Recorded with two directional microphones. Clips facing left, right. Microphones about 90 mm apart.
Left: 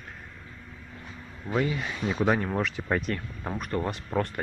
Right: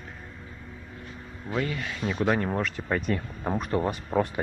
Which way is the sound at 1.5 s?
10° left (ahead or behind).